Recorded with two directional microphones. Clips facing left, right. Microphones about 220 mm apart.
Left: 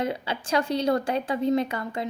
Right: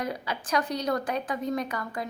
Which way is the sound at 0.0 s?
25° left (ahead or behind).